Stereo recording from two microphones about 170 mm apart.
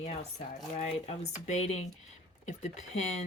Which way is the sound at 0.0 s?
40° left (ahead or behind).